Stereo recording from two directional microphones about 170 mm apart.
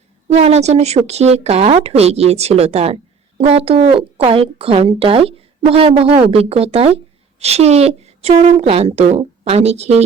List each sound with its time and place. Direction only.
0.3 s speech: 40° right (ahead or behind)